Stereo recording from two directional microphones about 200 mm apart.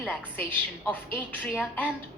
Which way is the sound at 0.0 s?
Centre (ahead or behind).